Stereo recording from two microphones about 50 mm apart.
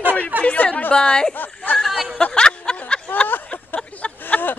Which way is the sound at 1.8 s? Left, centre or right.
Centre.